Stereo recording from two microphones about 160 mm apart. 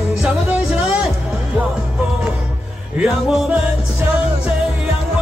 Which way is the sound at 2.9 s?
10° right (ahead or behind).